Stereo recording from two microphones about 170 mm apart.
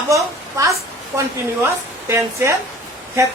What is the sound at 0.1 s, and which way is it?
A woman's voice, 20° right (ahead or behind).